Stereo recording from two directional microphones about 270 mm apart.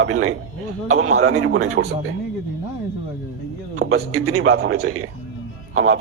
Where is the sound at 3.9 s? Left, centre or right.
Right.